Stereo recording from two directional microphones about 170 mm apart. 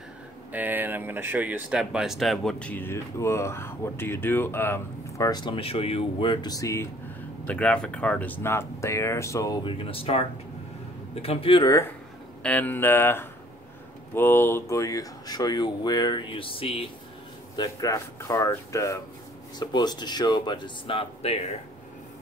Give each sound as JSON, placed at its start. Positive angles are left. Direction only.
{"t": 0.5, "sound": "speech", "side_deg": -10}
{"t": 7.4, "sound": "speech", "side_deg": 5}
{"t": 12.4, "sound": "speech", "side_deg": 10}
{"t": 17.6, "sound": "speech", "side_deg": 20}